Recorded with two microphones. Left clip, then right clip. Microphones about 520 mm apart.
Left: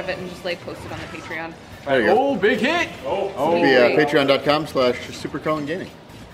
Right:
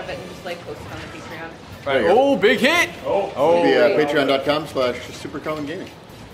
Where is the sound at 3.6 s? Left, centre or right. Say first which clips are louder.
Even; left.